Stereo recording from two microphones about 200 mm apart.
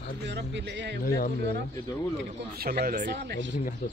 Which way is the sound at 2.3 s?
50° right (ahead or behind).